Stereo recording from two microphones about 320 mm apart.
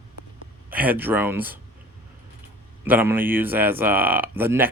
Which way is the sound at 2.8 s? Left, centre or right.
Centre.